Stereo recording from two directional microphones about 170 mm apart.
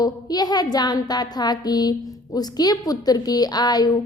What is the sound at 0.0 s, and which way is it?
A woman's voice, 25° left (ahead or behind).